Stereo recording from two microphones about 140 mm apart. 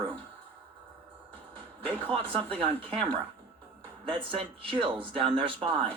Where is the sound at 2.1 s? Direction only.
40° right (ahead or behind).